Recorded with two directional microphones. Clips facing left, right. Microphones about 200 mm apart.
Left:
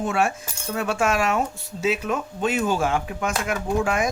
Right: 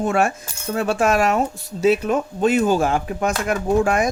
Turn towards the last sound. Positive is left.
turn(degrees=-40)  # may be behind; listen again after turning